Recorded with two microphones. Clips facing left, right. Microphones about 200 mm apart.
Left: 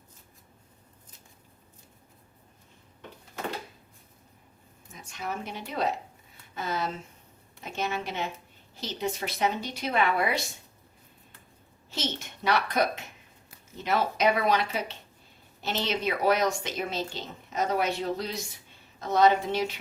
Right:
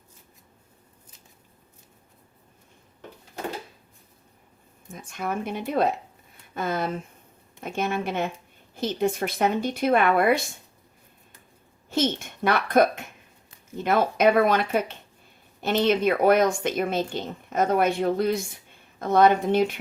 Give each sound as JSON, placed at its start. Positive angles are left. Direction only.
{"t": 4.9, "sound": "speech", "side_deg": -50}
{"t": 11.9, "sound": "speech", "side_deg": -50}